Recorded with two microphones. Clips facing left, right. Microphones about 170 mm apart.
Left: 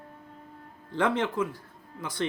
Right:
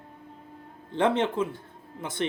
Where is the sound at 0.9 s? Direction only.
25° right (ahead or behind).